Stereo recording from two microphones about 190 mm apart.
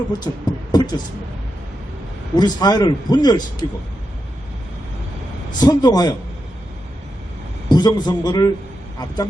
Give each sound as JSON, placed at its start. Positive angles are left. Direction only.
{"t": 0.7, "sound": "speech", "side_deg": 20}
{"t": 2.3, "sound": "a man's voice", "side_deg": 20}
{"t": 5.5, "sound": "a man's voice", "side_deg": 20}
{"t": 7.7, "sound": "a man's voice", "side_deg": 20}